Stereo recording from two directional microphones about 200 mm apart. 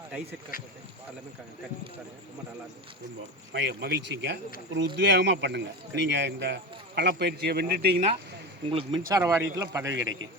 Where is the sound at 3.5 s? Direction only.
60° right (ahead or behind).